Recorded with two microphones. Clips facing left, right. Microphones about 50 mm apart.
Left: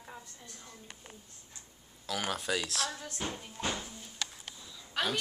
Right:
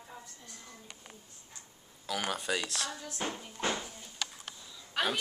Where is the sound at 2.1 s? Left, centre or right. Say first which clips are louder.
Even; centre.